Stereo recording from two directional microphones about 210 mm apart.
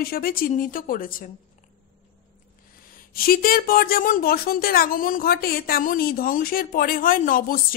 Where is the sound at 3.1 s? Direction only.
45° left (ahead or behind).